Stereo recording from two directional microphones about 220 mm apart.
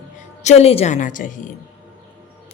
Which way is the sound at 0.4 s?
30° left (ahead or behind).